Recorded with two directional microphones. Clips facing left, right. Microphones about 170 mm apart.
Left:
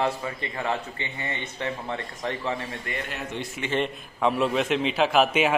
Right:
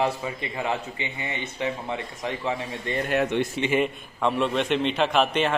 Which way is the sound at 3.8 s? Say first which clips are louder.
Right 1 dB; centre (ahead or behind).